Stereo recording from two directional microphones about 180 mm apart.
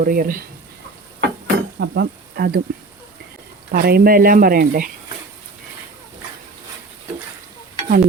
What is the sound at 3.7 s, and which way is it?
Speech, 60° right (ahead or behind).